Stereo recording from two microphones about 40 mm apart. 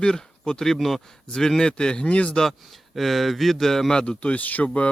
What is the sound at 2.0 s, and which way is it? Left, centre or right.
Speech, left.